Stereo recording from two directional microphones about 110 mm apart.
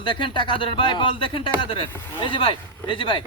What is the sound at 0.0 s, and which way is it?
Speech, 45° left (ahead or behind).